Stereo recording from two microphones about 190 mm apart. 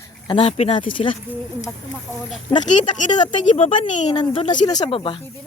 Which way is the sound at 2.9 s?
40° left (ahead or behind).